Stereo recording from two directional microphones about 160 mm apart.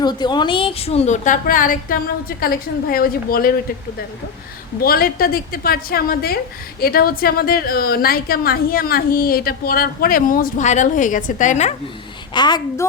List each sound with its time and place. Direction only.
0.0 s a woman's voice: 25° left (ahead or behind); by 3.5 s 70° left (ahead or behind)
4.8 s a woman's voice: 70° left (ahead or behind); by 11.7 s 50° left (ahead or behind)
12.3 s a woman's voice: 25° left (ahead or behind)